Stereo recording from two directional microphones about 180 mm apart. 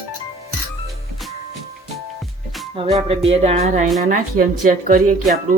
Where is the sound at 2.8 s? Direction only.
30° right (ahead or behind); by 5.3 s 45° right (ahead or behind).